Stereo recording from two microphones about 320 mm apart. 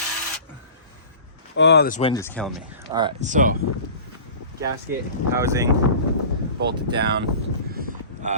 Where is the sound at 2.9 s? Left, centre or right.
Centre.